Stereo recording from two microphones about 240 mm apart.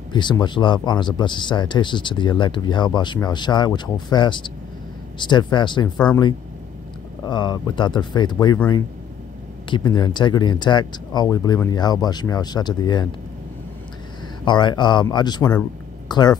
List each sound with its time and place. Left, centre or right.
0.1 s speech: centre
5.9 s speech: centre
7.2 s speech: centre
9.8 s speech: centre
14.4 s speech: centre